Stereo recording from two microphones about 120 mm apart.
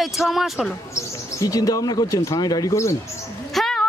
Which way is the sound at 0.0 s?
Centre (ahead or behind).